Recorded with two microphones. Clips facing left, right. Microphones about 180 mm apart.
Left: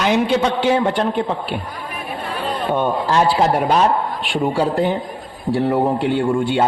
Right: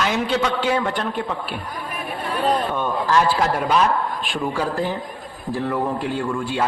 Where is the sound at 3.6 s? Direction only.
40° left (ahead or behind).